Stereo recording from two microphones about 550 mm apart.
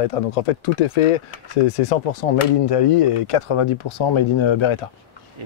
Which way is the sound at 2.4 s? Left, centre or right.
Left.